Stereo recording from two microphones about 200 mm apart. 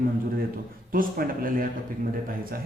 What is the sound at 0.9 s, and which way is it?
Speech, 45° right (ahead or behind).